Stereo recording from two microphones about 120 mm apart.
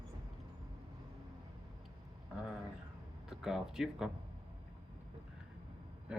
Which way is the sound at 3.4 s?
5° right (ahead or behind).